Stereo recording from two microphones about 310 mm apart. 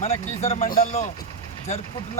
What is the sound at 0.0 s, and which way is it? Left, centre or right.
Speech, left.